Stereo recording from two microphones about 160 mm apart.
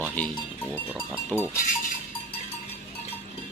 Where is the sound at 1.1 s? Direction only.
10° left (ahead or behind).